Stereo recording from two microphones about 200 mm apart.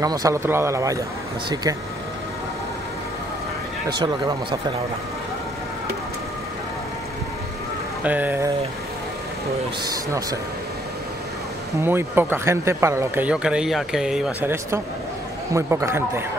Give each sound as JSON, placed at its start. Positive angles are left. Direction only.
{"t": 0.0, "sound": "speech", "side_deg": -20}
{"t": 4.0, "sound": "speech", "side_deg": -20}
{"t": 8.0, "sound": "speech", "side_deg": -10}
{"t": 11.8, "sound": "speech", "side_deg": -10}